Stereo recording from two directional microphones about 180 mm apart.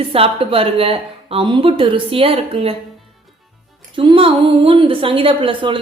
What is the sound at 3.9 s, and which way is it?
A woman's voice, 30° right (ahead or behind).